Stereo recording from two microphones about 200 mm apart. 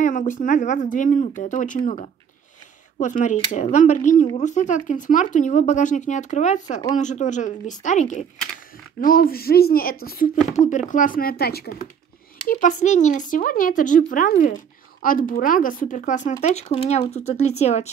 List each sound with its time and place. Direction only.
0.0 s a woman's voice: 40° left (ahead or behind)
3.0 s a woman's voice: 40° left (ahead or behind)
12.4 s a woman's voice: 40° left (ahead or behind)